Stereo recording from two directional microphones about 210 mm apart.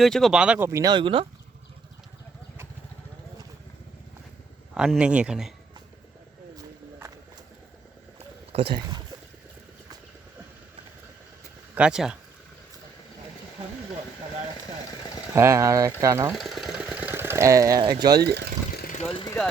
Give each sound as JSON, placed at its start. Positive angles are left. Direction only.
{"t": 0.0, "sound": "speech", "side_deg": 0}
{"t": 4.7, "sound": "speech", "side_deg": -5}
{"t": 8.5, "sound": "speech", "side_deg": -25}
{"t": 11.7, "sound": "speech", "side_deg": -5}
{"t": 15.4, "sound": "speech", "side_deg": -15}
{"t": 16.3, "sound": "speech", "side_deg": 0}
{"t": 18.2, "sound": "speech", "side_deg": -50}
{"t": 18.8, "sound": "vehicle", "side_deg": 35}
{"t": 19.1, "sound": "speech", "side_deg": 20}